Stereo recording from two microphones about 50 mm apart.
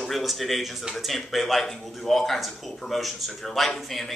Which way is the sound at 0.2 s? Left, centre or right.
Centre.